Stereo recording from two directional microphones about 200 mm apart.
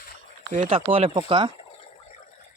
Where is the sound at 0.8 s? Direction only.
25° right (ahead or behind).